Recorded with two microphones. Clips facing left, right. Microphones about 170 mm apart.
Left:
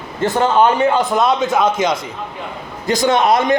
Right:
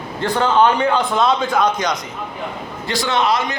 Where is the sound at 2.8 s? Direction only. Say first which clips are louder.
Left 5 dB; 45° left (ahead or behind).